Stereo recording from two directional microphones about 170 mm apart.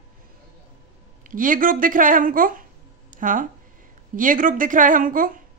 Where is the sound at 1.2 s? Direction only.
50° right (ahead or behind).